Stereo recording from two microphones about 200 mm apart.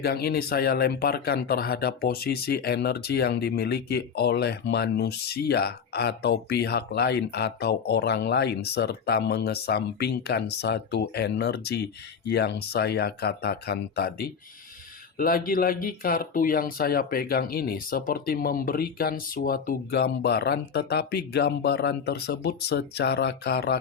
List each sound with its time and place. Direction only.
0.0 s speech: 50° left (ahead or behind)